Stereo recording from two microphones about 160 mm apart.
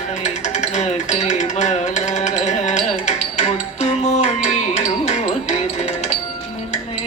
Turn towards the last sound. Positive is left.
turn(degrees=45)  # may be behind; listen again after turning